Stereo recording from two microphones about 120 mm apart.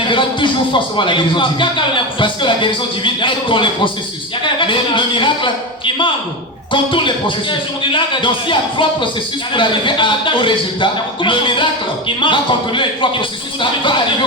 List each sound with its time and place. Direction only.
0.0 s speech: 45° left (ahead or behind)